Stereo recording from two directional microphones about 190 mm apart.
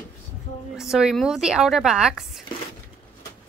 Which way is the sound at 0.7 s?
5° right (ahead or behind).